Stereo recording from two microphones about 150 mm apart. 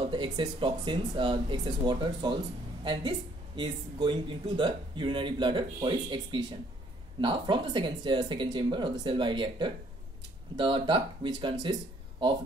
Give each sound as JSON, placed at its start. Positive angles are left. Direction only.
{"t": 0.0, "sound": "speech", "side_deg": -35}